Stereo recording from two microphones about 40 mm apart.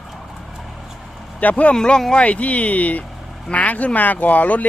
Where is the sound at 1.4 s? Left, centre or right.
Left.